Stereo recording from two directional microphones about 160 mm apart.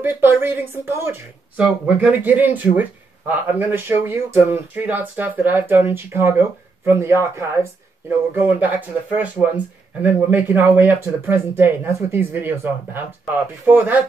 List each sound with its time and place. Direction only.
0.0 s speech: 15° right (ahead or behind)